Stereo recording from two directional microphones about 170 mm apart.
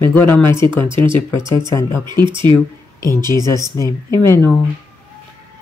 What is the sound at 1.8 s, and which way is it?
Speech, 15° left (ahead or behind).